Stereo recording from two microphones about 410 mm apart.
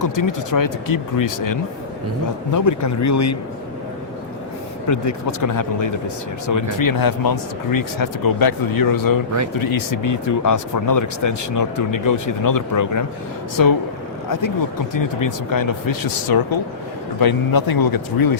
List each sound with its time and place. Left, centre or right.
0.0 s speech: left
4.9 s speech: left